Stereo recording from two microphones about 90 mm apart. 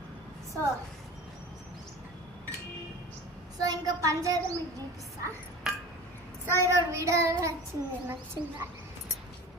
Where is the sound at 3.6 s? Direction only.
45° right (ahead or behind).